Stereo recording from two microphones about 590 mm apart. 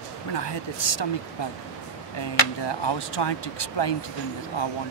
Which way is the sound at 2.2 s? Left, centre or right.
Left.